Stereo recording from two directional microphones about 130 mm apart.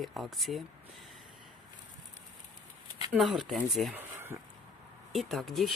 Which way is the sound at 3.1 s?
Centre (ahead or behind).